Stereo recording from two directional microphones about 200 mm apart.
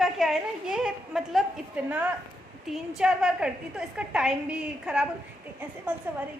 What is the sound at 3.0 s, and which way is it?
A woman's voice, 5° right (ahead or behind).